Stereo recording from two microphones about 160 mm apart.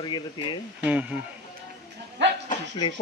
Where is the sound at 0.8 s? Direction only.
10° right (ahead or behind).